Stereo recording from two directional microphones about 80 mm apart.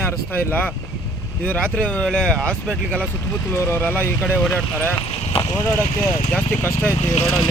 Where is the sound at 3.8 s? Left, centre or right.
Left.